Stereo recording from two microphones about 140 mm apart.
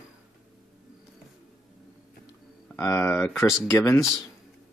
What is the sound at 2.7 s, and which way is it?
Speech, 15° left (ahead or behind).